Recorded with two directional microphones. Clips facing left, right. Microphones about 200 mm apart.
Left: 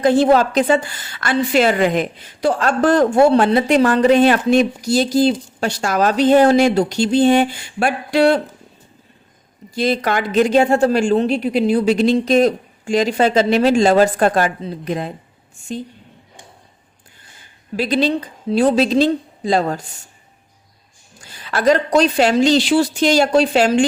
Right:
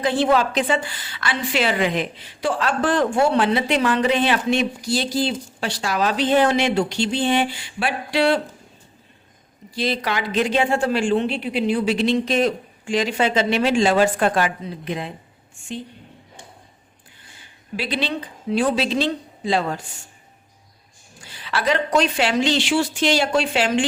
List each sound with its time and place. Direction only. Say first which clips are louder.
0.0 s a woman's voice: left 6 dB; 45° left (ahead or behind)
9.7 s speech: left 5 dB; 45° left (ahead or behind)
17.7 s speech: left 8 dB; 40° left (ahead or behind)
21.2 s speech: left 7 dB; 45° left (ahead or behind)